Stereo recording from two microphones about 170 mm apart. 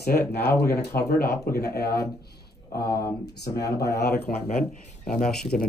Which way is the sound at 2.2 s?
70° left (ahead or behind).